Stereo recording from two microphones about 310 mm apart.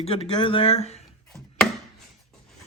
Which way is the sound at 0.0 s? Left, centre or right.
Centre.